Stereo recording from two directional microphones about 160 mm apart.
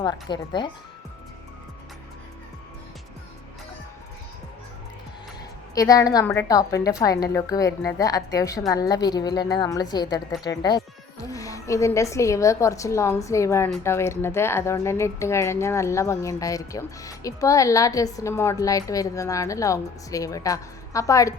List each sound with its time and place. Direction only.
0.0 s a woman's voice: 25° left (ahead or behind)
5.7 s a woman's voice: 20° left (ahead or behind)